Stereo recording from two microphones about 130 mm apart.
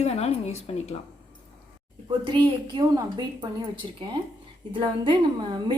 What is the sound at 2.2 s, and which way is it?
A woman's voice, 35° right (ahead or behind).